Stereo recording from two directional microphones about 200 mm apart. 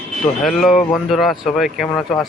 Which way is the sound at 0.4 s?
Centre (ahead or behind).